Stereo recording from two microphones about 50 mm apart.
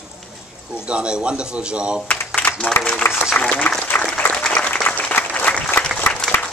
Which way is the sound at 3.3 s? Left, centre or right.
Left.